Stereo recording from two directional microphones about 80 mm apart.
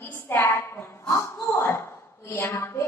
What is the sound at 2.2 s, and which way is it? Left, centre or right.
Speech, left.